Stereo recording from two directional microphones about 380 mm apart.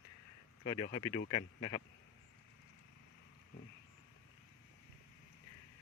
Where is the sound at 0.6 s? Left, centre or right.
Centre.